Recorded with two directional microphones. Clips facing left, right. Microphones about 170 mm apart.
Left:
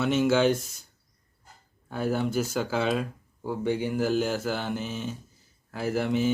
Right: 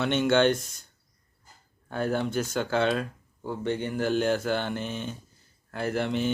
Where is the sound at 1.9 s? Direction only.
5° left (ahead or behind).